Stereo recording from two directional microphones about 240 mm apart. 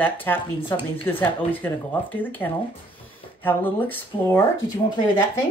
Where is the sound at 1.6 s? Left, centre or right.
Centre.